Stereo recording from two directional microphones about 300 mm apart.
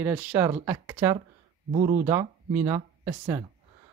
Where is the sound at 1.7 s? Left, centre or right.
Right.